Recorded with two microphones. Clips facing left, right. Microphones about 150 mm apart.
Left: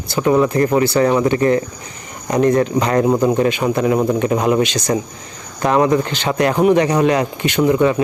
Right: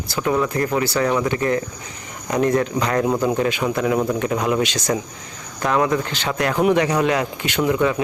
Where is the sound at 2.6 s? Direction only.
20° left (ahead or behind).